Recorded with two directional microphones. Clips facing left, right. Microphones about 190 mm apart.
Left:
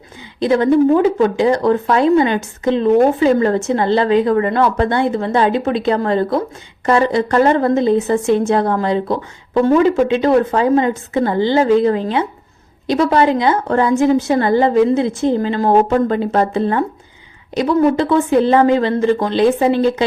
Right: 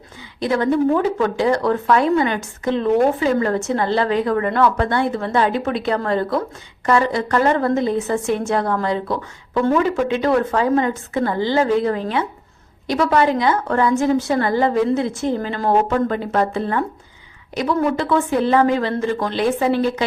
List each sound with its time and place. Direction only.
0.3 s speech: 25° left (ahead or behind)